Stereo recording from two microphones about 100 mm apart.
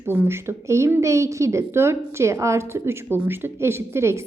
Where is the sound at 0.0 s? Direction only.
20° right (ahead or behind).